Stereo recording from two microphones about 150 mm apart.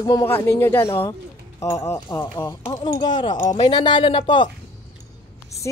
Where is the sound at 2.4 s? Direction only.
30° left (ahead or behind).